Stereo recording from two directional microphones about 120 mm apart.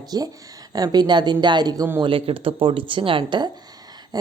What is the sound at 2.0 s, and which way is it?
A woman's voice, 45° right (ahead or behind).